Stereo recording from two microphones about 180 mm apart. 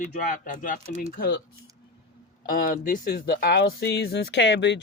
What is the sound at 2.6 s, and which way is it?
Speech, 50° left (ahead or behind).